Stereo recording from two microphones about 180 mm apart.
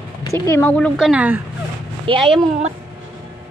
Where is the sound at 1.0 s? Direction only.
5° right (ahead or behind).